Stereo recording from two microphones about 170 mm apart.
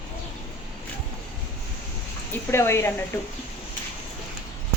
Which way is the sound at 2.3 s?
15° left (ahead or behind).